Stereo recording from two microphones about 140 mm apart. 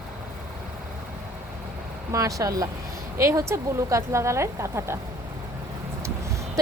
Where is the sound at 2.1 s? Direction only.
25° right (ahead or behind).